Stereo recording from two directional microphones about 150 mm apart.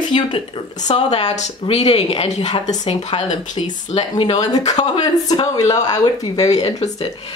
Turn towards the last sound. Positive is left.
turn(degrees=40)  # may be behind; listen again after turning